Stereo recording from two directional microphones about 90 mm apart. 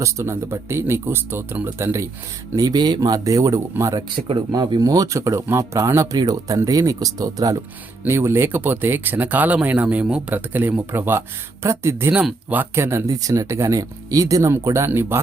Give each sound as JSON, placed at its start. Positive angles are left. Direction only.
{"t": 0.0, "sound": "speech", "side_deg": -30}
{"t": 2.6, "sound": "speech", "side_deg": -50}
{"t": 4.2, "sound": "speech", "side_deg": -90}
{"t": 4.5, "sound": "speech", "side_deg": -45}
{"t": 8.0, "sound": "speech", "side_deg": -30}
{"t": 13.1, "sound": "speech", "side_deg": -40}